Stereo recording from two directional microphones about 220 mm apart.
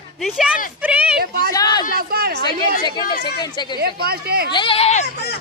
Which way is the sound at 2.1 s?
45° right (ahead or behind).